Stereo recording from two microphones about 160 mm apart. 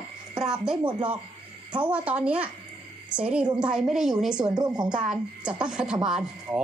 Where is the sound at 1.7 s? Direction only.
10° right (ahead or behind).